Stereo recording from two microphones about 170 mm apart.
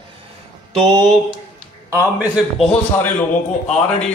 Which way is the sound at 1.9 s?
15° right (ahead or behind).